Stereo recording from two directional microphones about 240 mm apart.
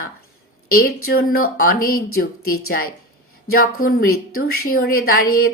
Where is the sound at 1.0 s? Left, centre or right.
Left.